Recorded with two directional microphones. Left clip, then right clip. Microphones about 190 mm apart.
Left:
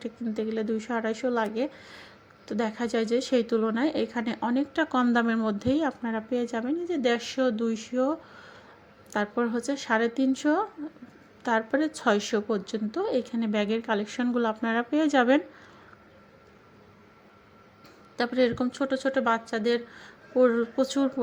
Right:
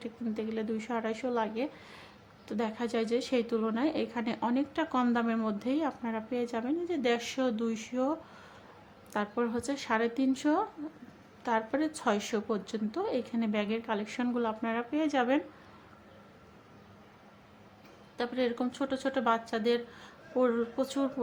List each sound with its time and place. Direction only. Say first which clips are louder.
0.0 s a woman's voice: left 5 dB; 15° left (ahead or behind)
18.2 s a woman's voice: left 6 dB; 25° left (ahead or behind)